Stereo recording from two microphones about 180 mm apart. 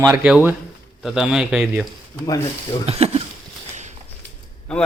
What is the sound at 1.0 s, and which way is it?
Speech, centre (ahead or behind).